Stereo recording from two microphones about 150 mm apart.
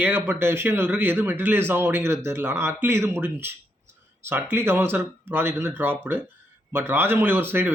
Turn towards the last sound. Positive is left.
turn(degrees=-15)  # may be behind; listen again after turning